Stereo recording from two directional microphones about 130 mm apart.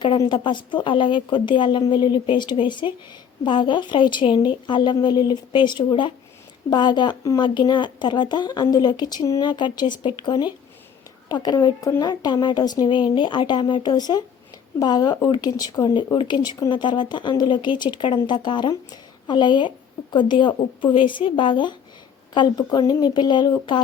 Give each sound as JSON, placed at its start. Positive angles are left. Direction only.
{"t": 0.2, "sound": "speech", "side_deg": 35}